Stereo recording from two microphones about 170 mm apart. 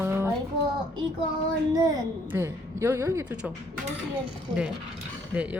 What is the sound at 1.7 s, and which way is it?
A woman's voice, 20° right (ahead or behind).